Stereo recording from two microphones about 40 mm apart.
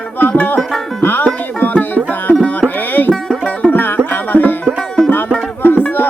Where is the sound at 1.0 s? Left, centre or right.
Left.